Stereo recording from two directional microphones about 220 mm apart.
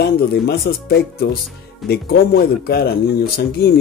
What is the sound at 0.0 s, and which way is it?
Speech, 45° left (ahead or behind).